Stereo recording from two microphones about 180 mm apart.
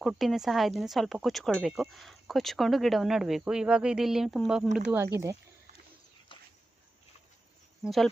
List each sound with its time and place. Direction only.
0.0 s speech: centre (ahead or behind)
4.9 s speech: 15° right (ahead or behind)
7.9 s speech: centre (ahead or behind)